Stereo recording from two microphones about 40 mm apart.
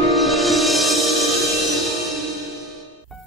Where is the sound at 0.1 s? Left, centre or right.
Centre.